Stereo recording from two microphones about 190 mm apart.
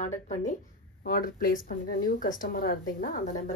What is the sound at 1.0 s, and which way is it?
Speech, 50° left (ahead or behind).